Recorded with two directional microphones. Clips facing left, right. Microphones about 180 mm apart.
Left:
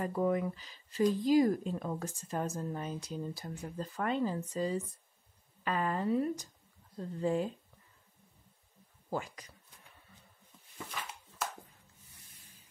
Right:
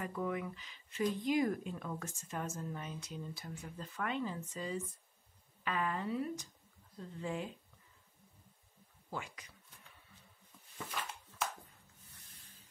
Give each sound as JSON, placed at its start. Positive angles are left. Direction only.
{"t": 0.0, "sound": "speech", "side_deg": 35}
{"t": 9.1, "sound": "speech", "side_deg": 40}